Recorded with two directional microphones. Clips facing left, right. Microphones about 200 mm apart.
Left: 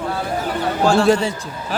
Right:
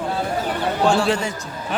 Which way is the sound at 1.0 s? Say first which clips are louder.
Left 6 dB; 40° left (ahead or behind).